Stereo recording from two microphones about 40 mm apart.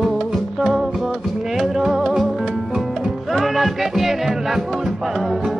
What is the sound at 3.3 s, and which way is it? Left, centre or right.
Music, centre.